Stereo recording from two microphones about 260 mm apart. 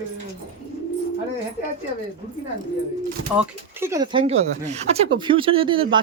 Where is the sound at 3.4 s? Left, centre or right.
Centre.